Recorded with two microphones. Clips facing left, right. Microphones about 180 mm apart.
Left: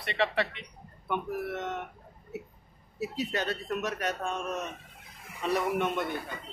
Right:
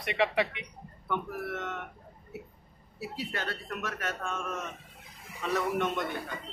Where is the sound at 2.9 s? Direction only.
20° left (ahead or behind).